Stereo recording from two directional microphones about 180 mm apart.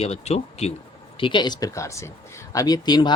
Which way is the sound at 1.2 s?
25° left (ahead or behind).